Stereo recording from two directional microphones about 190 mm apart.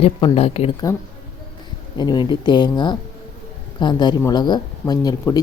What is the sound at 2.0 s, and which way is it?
Speech, 20° left (ahead or behind).